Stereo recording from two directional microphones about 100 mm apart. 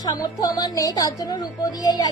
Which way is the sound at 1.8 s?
45° left (ahead or behind).